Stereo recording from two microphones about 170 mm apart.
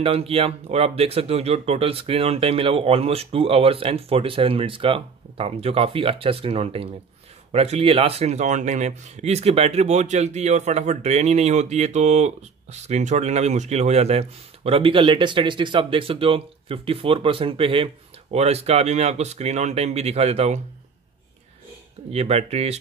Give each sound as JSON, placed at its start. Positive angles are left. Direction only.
{"t": 0.0, "sound": "speech", "side_deg": -35}
{"t": 22.1, "sound": "speech", "side_deg": -40}